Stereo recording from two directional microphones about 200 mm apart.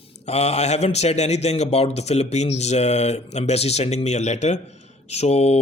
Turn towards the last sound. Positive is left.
turn(degrees=30)  # may be behind; listen again after turning